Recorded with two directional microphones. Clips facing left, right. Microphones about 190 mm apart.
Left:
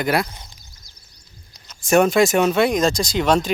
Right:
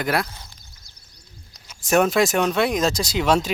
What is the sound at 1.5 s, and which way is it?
Speech, centre (ahead or behind).